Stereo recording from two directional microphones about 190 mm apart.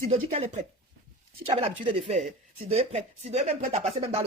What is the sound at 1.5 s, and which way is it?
Speech, 30° right (ahead or behind).